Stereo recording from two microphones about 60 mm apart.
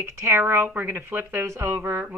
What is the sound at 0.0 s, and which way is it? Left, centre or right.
Speech, right.